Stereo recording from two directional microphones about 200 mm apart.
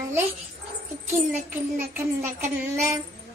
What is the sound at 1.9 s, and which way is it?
Child singing, 10° right (ahead or behind).